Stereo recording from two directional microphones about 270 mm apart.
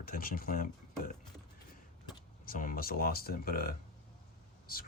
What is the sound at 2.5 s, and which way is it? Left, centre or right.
Speech, left.